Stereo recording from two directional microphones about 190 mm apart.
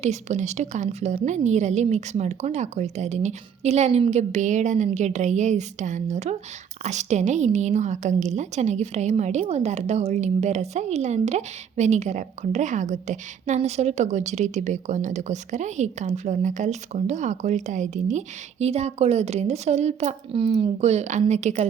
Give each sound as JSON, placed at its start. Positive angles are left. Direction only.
{"t": 0.0, "sound": "a woman's voice", "side_deg": -40}